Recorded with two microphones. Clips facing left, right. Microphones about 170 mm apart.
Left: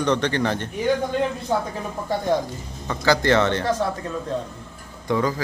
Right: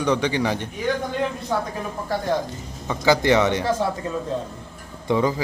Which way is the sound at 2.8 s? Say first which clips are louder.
Right 1 dB; 15° right (ahead or behind).